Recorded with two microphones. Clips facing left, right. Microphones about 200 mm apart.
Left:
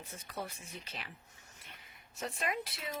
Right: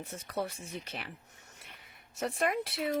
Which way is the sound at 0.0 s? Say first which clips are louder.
Right 7 dB; 70° right (ahead or behind).